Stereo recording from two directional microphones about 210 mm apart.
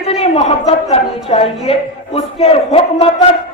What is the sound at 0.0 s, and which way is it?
A man's voice, 30° left (ahead or behind).